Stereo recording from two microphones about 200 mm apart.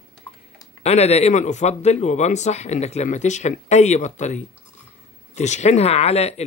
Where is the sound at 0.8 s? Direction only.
30° left (ahead or behind).